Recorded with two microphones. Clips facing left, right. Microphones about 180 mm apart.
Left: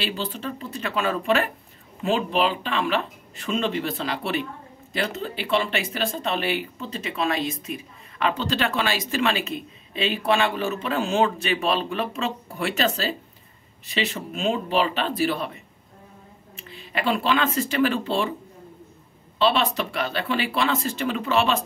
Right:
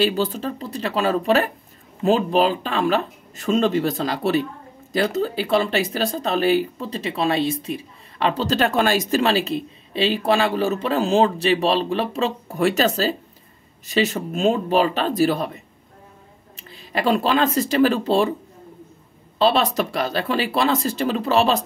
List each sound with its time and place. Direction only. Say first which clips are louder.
0.0 s speech: right 8 dB; 45° right (ahead or behind)
19.3 s speech: right 3 dB; 40° right (ahead or behind)